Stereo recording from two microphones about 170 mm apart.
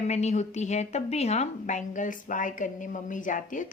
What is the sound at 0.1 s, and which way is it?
A woman's voice, 40° left (ahead or behind).